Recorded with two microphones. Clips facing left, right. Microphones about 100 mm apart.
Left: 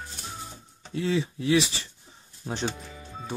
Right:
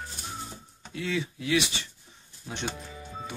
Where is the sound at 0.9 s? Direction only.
30° left (ahead or behind).